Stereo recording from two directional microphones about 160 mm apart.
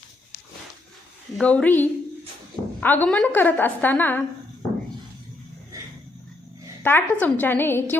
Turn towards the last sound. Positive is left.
turn(degrees=15)  # may be behind; listen again after turning